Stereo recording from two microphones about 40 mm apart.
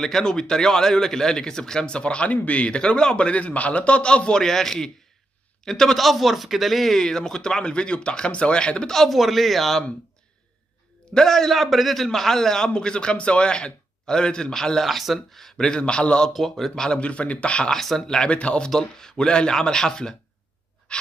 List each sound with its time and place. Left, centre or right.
0.0 s a man's voice: centre; by 2.8 s left
2.8 s a man's voice: centre
5.9 s a man's voice: centre; by 8.9 s left
8.9 s speech: centre
11.1 s a man's voice: centre
14.9 s speech: centre
15.5 s a man's voice: centre
16.3 s a man's voice: centre
17.0 s speech: left
17.6 s a man's voice: centre
18.0 s a man's voice: left
18.7 s a man's voice: centre
20.9 s a sound: left